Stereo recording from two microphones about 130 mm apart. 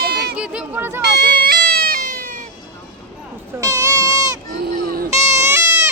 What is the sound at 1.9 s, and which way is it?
Cat, 90° right.